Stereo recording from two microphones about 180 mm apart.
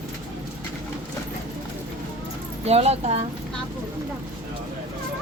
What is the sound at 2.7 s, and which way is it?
Speech, 35° right (ahead or behind).